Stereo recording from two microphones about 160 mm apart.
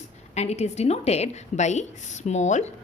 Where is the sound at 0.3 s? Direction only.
45° left (ahead or behind).